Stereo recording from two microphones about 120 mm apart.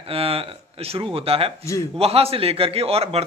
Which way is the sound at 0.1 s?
55° right (ahead or behind).